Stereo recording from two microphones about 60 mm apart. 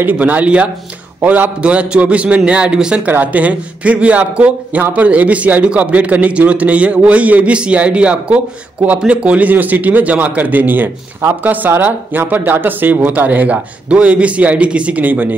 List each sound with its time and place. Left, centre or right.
0.0 s speech: right
3.1 s speech: right